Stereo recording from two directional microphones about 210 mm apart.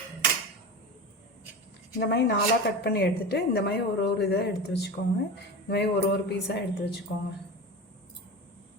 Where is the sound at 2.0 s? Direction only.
50° left (ahead or behind).